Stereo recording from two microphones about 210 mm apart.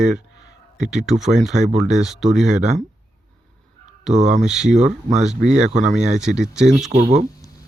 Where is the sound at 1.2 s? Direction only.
Centre (ahead or behind).